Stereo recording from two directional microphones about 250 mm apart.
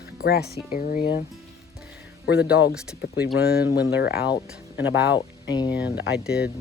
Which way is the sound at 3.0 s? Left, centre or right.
Left.